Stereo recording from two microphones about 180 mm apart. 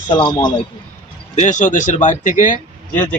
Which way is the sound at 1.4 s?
45° left (ahead or behind).